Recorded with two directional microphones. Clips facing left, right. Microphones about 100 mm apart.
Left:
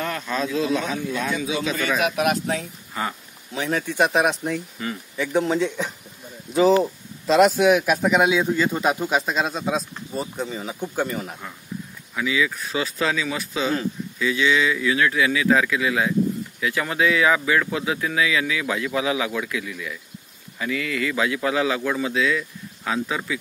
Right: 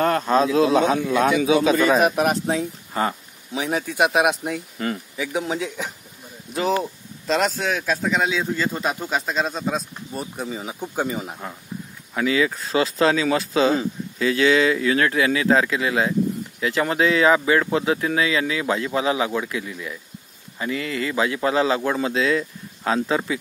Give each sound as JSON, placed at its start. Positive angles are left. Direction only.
{"t": 0.0, "sound": "a man's voice", "side_deg": -40}
{"t": 3.5, "sound": "a man's voice", "side_deg": -10}
{"t": 7.5, "sound": "speech", "side_deg": 15}
{"t": 11.0, "sound": "speech", "side_deg": -15}
{"t": 12.2, "sound": "speech", "side_deg": -45}